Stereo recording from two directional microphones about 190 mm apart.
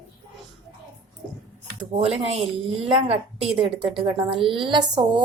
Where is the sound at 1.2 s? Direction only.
5° right (ahead or behind).